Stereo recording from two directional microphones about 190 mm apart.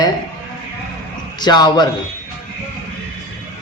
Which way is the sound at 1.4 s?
20° left (ahead or behind).